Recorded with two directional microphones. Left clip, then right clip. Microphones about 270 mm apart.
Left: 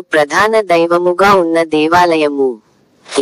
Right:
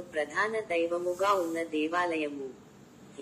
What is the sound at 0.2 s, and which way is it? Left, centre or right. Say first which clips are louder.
Speech: left 18 dB; left.